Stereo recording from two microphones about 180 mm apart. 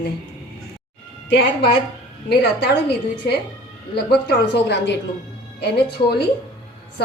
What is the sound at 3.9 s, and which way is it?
A woman's voice, 65° left (ahead or behind).